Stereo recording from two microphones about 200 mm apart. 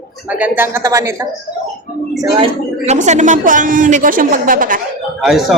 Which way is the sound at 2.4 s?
35° right (ahead or behind).